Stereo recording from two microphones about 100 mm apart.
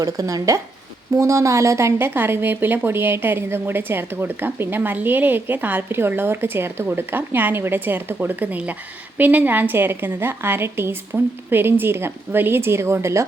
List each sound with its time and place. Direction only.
0.0 s speech: 35° right (ahead or behind)